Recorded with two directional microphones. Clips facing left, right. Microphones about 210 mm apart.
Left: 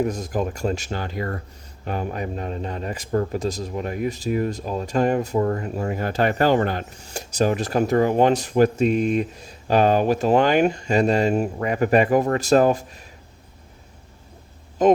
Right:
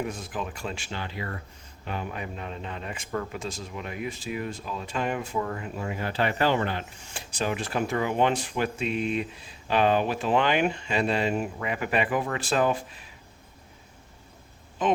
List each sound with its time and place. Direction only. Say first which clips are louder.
0.0 s speech: left 9 dB; 40° left (ahead or behind)
14.8 s speech: left 9 dB; 40° left (ahead or behind)